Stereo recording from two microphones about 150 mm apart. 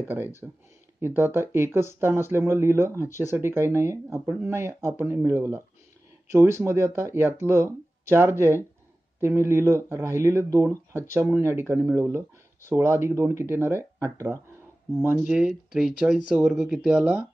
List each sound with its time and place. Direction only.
0.4 s speech: 15° right (ahead or behind)